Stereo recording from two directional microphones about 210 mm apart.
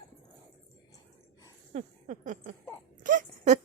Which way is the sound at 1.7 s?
35° right (ahead or behind).